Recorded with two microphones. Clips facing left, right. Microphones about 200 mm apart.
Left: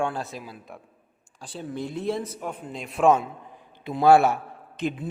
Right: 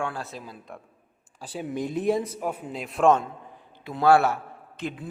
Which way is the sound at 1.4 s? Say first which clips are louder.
Right 2 dB; 10° right (ahead or behind).